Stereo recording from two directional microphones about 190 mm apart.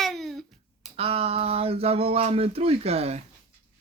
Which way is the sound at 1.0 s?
30° right (ahead or behind).